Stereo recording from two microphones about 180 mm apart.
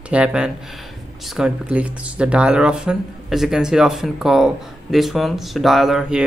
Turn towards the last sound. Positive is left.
turn(degrees=0)  # may be behind; listen again after turning